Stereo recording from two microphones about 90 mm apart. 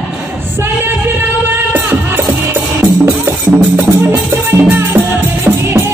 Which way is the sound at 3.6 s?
20° right (ahead or behind).